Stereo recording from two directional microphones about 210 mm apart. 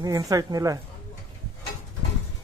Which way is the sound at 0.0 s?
15° right (ahead or behind).